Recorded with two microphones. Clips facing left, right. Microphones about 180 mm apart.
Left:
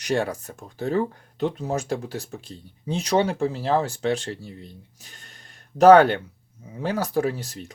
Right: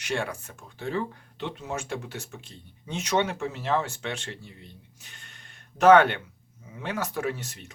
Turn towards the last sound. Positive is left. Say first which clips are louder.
# left 4 dB
turn(degrees=35)  # may be behind; listen again after turning